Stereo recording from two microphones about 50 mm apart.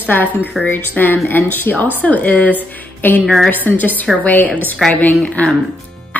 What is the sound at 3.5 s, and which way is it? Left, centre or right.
A woman's voice, left.